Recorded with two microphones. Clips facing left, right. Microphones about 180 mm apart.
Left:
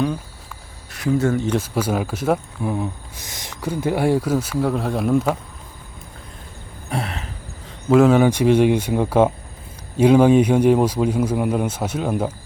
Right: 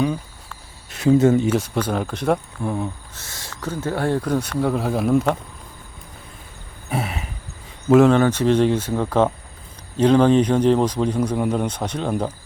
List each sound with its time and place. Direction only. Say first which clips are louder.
0.9 s speech: right 4 dB; 25° right (ahead or behind)
1.5 s speech: even; centre (ahead or behind)
3.2 s speech: left 1 dB; 15° left (ahead or behind); by 5.4 s centre (ahead or behind)
6.9 s a sound: right 1 dB; 5° right (ahead or behind)
7.9 s speech: even; 5° left (ahead or behind)